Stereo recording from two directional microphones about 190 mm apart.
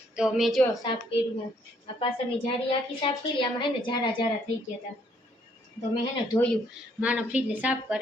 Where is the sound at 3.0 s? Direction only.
25° left (ahead or behind).